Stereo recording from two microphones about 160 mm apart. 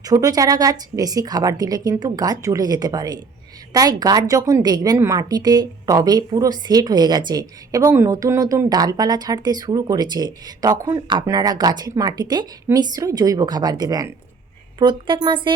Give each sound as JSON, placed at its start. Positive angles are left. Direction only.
{"t": 0.0, "sound": "a woman's voice", "side_deg": -20}